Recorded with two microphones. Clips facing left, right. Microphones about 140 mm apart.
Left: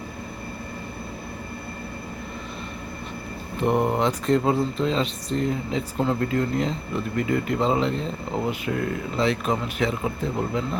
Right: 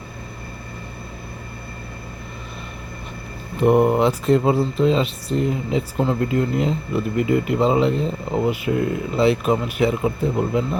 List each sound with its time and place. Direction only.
3.6 s speech: 10° right (ahead or behind)